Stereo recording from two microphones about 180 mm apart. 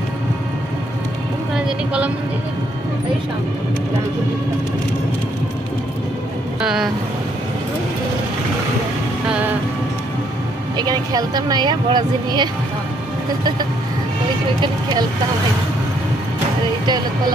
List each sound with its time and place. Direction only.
1.5 s a sound: 5° right (ahead or behind)
6.6 s vehicle: 5° right (ahead or behind)
9.3 s music: 10° right (ahead or behind)
10.8 s a woman's voice: 20° right (ahead or behind)
14.6 s speech: 25° right (ahead or behind)